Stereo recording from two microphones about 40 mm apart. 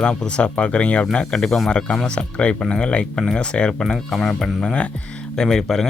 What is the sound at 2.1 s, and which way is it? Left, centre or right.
Speech, left.